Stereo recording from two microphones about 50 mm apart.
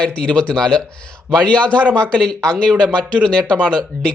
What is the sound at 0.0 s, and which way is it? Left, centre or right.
Speech, left.